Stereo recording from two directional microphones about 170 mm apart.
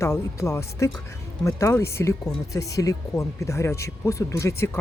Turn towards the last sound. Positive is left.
turn(degrees=15)  # may be behind; listen again after turning